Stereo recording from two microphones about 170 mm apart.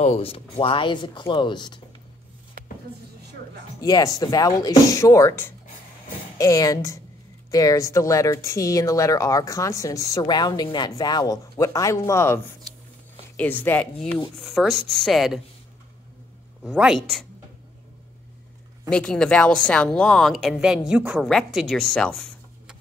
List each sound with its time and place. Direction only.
0.0 s speech: 35° left (ahead or behind)
2.6 s a sound: 65° right (ahead or behind)
3.8 s speech: 20° left (ahead or behind)
13.4 s a woman's voice: 10° left (ahead or behind)
16.6 s a woman's voice: 5° right (ahead or behind)
18.9 s a woman's voice: 5° left (ahead or behind)